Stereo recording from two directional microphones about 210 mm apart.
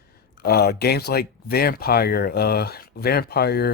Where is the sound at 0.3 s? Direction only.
50° left (ahead or behind).